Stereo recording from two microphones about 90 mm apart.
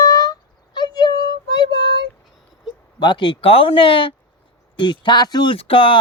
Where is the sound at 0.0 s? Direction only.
40° left (ahead or behind).